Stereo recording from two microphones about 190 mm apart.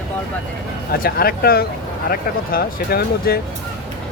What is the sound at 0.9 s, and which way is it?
Speech, 55° left (ahead or behind).